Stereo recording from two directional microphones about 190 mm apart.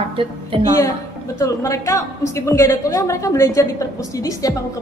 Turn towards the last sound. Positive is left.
turn(degrees=15)  # may be behind; listen again after turning